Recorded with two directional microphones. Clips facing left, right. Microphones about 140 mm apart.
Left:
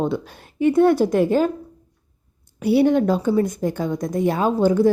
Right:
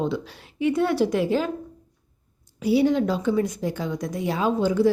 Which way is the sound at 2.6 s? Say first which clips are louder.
Left 4 dB; 60° left (ahead or behind).